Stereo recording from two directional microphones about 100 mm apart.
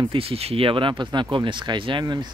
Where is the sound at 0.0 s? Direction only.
65° right (ahead or behind).